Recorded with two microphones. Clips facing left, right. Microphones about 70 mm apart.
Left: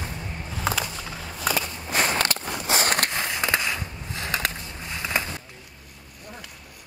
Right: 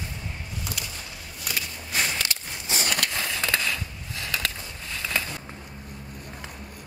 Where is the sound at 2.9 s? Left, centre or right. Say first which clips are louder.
Left 3 dB; left.